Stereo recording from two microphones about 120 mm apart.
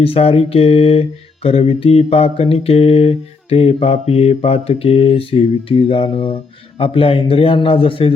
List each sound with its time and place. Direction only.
0.0 s mantra: 55° left (ahead or behind)